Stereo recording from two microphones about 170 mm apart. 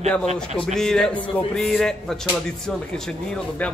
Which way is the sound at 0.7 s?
5° left (ahead or behind).